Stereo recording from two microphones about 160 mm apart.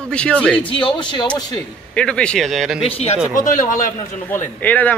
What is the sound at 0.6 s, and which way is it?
Speech, 30° left (ahead or behind).